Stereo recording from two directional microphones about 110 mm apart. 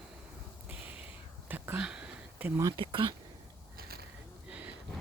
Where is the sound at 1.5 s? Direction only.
15° right (ahead or behind).